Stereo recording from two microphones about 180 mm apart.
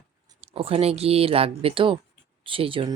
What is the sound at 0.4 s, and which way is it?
A woman's voice, 30° right (ahead or behind).